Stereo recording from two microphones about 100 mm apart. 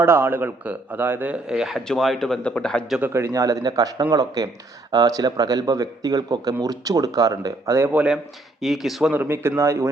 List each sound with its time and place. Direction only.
0.0 s a man's voice: 25° right (ahead or behind); by 2.8 s 10° left (ahead or behind)
3.0 s speech: 30° right (ahead or behind)
7.9 s speech: 10° right (ahead or behind)
9.1 s a man's voice: 20° right (ahead or behind)